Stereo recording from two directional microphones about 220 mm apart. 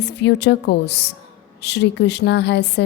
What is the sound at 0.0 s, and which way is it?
A woman's voice, 50° left (ahead or behind).